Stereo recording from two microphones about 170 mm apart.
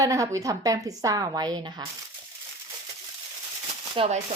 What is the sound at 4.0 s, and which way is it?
Speech, 40° right (ahead or behind).